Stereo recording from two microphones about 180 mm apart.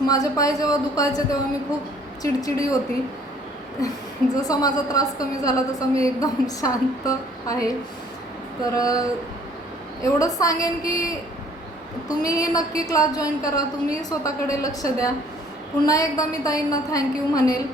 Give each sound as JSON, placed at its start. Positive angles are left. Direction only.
{"t": 0.1, "sound": "a woman's voice", "side_deg": 20}
{"t": 4.4, "sound": "a woman's voice", "side_deg": 20}
{"t": 8.7, "sound": "a woman's voice", "side_deg": 20}
{"t": 10.2, "sound": "a woman's voice", "side_deg": 20}